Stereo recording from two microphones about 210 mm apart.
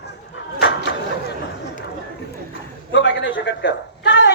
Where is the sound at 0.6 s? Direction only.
50° left (ahead or behind).